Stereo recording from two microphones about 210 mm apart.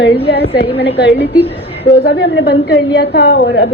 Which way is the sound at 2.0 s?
50° left (ahead or behind).